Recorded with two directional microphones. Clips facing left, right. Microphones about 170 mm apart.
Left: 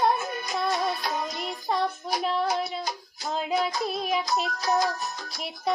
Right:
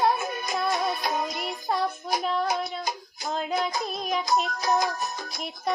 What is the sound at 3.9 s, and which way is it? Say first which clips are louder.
Music: right 1 dB; 5° left (ahead or behind).